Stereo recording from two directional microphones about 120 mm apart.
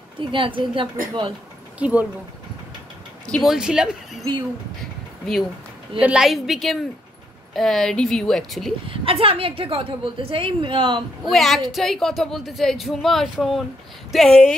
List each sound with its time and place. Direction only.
0.2 s a woman's voice: 45° right (ahead or behind)
1.8 s speech: 10° right (ahead or behind)
3.3 s speech: centre (ahead or behind)
5.9 s speech: 5° right (ahead or behind)
8.8 s a woman's voice: 50° right (ahead or behind)
11.2 s speech: centre (ahead or behind)